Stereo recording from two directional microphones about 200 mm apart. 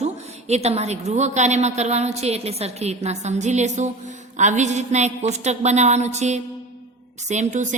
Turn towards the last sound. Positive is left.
turn(degrees=-35)  # may be behind; listen again after turning